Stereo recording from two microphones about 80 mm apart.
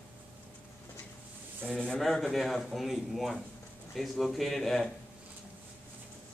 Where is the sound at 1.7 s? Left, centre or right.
Centre.